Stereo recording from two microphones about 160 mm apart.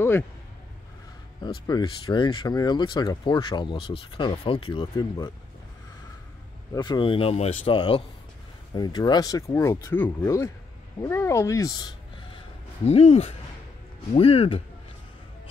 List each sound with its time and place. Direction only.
1.7 s speech: 25° left (ahead or behind)
6.7 s speech: 25° left (ahead or behind)
12.8 s speech: 40° left (ahead or behind)